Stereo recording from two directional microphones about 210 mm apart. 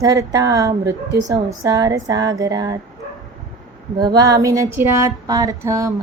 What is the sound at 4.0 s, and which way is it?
Female singing, 20° right (ahead or behind).